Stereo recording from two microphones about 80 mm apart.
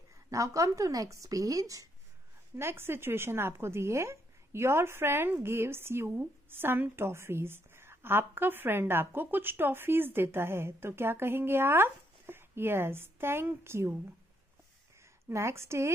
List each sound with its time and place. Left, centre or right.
0.3 s a woman's voice: right
2.5 s speech: right
15.2 s speech: right